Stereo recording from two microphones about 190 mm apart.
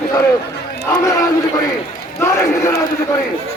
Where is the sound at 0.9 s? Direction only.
15° left (ahead or behind).